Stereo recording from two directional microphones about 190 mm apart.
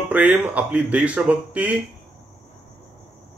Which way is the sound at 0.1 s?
10° right (ahead or behind).